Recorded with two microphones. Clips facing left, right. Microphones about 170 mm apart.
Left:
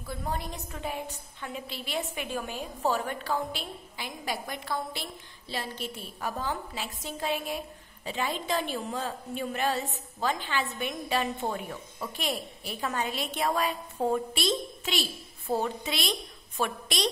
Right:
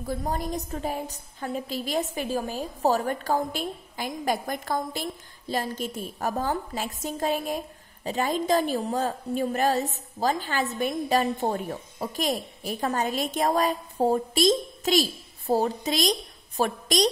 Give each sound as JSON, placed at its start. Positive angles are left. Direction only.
{"t": 0.0, "sound": "a woman's voice", "side_deg": -40}